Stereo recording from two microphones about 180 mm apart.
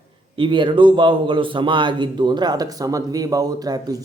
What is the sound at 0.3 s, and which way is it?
A man's voice, 25° right (ahead or behind).